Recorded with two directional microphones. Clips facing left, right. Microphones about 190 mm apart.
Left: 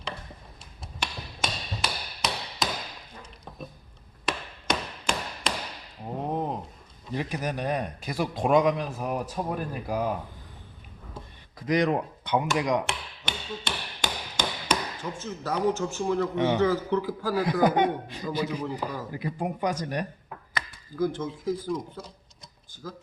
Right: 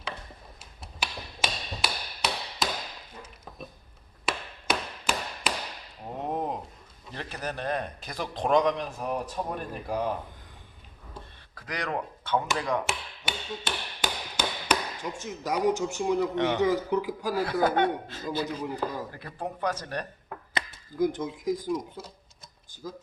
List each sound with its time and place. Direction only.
0.6 s tick-tock: 5° right (ahead or behind)
4.3 s a sound: 5° right (ahead or behind)
7.1 s a man's voice: 10° left (ahead or behind)
11.5 s a man's voice: 20° left (ahead or behind)
12.8 s tap: 5° right (ahead or behind)
16.3 s a man's voice: 15° left (ahead or behind)
16.6 s a man's voice: 15° right (ahead or behind)
17.3 s a man's voice: 15° left (ahead or behind)
20.5 s a man's voice: 20° right (ahead or behind)